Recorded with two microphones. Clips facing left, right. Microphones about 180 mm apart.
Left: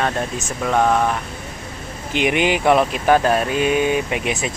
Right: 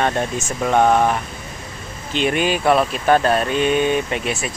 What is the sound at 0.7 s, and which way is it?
Speech, 20° right (ahead or behind).